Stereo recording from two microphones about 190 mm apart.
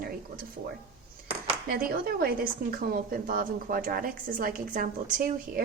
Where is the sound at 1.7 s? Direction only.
50° right (ahead or behind).